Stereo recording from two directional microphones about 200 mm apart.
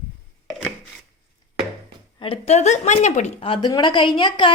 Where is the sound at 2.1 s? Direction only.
25° left (ahead or behind).